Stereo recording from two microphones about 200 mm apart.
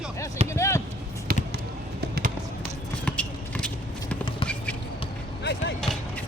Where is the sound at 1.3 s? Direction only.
50° right (ahead or behind).